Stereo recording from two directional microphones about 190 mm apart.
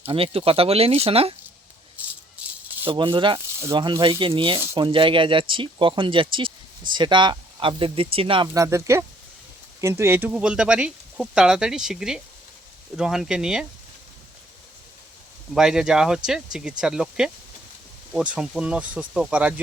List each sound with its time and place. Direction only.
0.0 s speech: 30° right (ahead or behind)
2.0 s rattle: 10° right (ahead or behind)
2.8 s speech: 25° right (ahead or behind); by 13.7 s 5° right (ahead or behind)
15.5 s speech: 5° right (ahead or behind)
18.3 s speech: 5° right (ahead or behind)